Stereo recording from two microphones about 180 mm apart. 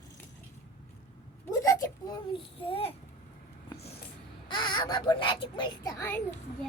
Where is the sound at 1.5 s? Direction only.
20° left (ahead or behind).